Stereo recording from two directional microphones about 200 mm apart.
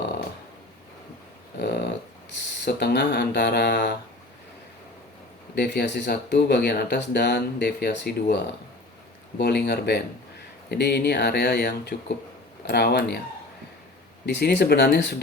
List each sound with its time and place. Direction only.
1.5 s a sound: 55° left (ahead or behind)
2.6 s speech: 55° left (ahead or behind)
5.5 s speech: 60° left (ahead or behind)
9.4 s speech: 55° left (ahead or behind)
14.3 s speech: 60° left (ahead or behind)